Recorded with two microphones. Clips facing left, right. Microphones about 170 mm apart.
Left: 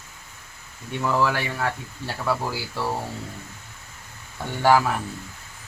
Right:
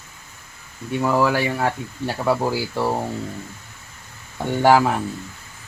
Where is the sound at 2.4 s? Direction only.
30° right (ahead or behind).